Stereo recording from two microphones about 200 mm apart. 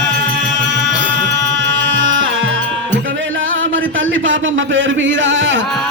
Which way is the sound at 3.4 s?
75° right (ahead or behind).